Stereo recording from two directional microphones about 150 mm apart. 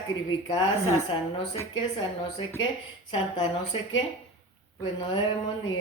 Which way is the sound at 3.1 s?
30° left (ahead or behind).